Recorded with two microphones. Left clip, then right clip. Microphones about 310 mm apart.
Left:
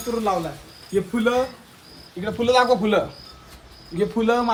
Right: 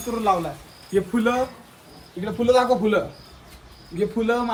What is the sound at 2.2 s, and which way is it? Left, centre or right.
Speech, centre.